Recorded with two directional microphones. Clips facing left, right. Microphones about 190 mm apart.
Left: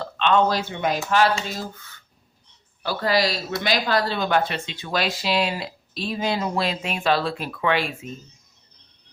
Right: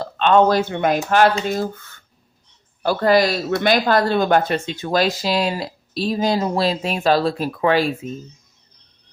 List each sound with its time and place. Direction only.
0.0 s speech: 45° right (ahead or behind)